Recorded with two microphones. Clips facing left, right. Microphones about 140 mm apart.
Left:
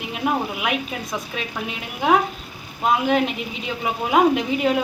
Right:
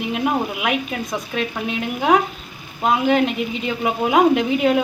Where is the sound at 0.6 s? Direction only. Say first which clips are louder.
Right 3 dB; centre (ahead or behind).